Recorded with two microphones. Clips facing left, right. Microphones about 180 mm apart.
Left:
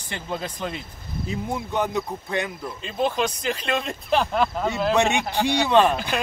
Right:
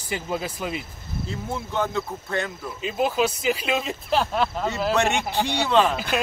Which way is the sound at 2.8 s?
5° right (ahead or behind).